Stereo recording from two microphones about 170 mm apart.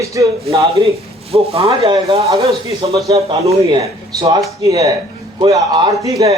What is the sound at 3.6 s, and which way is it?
A man's voice, 20° right (ahead or behind).